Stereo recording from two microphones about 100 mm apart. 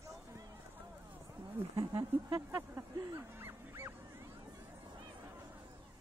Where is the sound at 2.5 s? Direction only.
25° right (ahead or behind).